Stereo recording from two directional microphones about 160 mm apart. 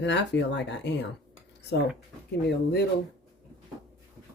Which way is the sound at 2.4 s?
90° left.